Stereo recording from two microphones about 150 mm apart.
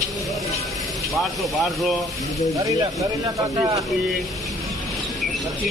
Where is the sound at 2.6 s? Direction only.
20° right (ahead or behind).